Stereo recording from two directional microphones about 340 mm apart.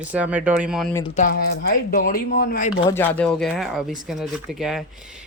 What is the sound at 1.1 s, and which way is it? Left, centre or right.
Speech, left.